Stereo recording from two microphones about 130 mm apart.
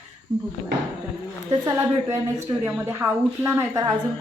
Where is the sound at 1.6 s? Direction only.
25° right (ahead or behind).